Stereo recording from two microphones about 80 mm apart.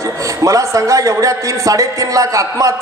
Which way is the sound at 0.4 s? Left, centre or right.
Right.